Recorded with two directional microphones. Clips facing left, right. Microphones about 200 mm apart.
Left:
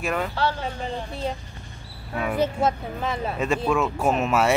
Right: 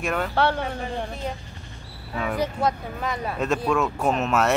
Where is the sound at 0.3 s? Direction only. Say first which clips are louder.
Right 3 dB; 60° right (ahead or behind).